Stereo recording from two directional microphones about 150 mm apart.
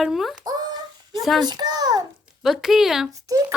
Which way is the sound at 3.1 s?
20° right (ahead or behind).